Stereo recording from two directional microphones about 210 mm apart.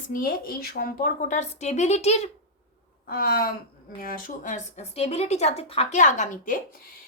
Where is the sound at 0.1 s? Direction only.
45° left (ahead or behind).